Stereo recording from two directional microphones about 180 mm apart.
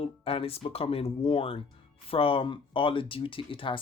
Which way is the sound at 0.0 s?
30° left (ahead or behind).